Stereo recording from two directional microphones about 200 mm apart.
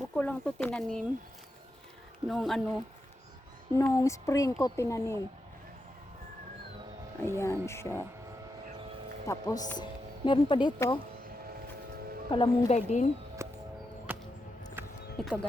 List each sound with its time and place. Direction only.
0.0 s speech: 5° left (ahead or behind)
2.2 s speech: centre (ahead or behind)
3.8 s speech: 15° left (ahead or behind)
7.2 s speech: 15° left (ahead or behind)
9.2 s speech: 15° left (ahead or behind)
12.3 s a woman's voice: 25° left (ahead or behind)
13.4 s music: 15° right (ahead or behind)
15.2 s speech: centre (ahead or behind)